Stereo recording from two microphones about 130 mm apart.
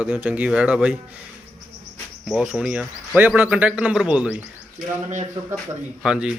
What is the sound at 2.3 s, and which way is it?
Speech, 5° right (ahead or behind).